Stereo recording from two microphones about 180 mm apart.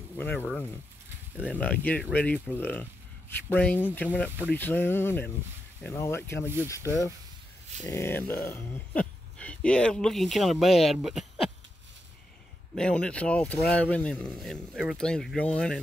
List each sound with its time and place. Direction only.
0.2 s speech: 10° left (ahead or behind)
1.5 s speech: 10° left (ahead or behind)
6.4 s speech: 10° right (ahead or behind)
6.7 s speech: 15° left (ahead or behind); by 11.4 s centre (ahead or behind)
12.7 s speech: 5° left (ahead or behind)